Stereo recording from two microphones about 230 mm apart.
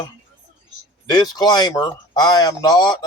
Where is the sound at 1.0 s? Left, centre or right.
Centre.